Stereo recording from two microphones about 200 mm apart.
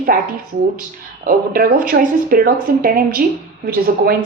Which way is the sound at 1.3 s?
45° right (ahead or behind).